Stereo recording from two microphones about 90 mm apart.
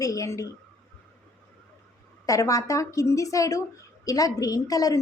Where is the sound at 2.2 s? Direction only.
40° left (ahead or behind).